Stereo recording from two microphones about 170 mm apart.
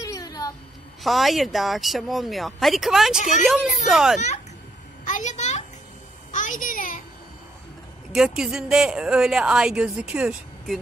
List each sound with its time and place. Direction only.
0.0 s a sound: 20° left (ahead or behind)
1.0 s a woman's voice: centre (ahead or behind)
3.2 s a woman's voice: 45° left (ahead or behind)
3.8 s a woman's voice: 5° right (ahead or behind)
5.0 s a sound: 45° left (ahead or behind)
8.1 s a woman's voice: 5° right (ahead or behind)